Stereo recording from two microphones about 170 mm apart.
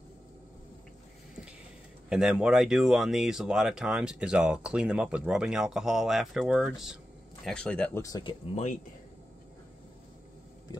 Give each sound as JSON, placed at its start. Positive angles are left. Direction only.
{"t": 2.0, "sound": "speech", "side_deg": -5}
{"t": 8.0, "sound": "speech", "side_deg": 25}